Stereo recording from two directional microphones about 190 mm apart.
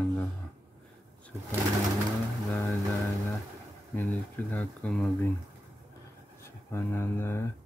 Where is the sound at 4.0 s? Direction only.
10° left (ahead or behind).